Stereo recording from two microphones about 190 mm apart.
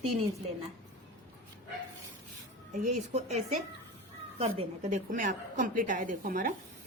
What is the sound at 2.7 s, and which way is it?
A woman's voice, 40° right (ahead or behind).